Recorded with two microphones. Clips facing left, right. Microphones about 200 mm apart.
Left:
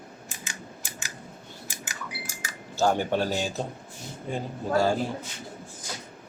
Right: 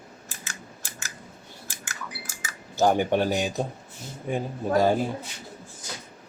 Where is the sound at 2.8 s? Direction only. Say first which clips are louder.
Right 3 dB; 15° right (ahead or behind).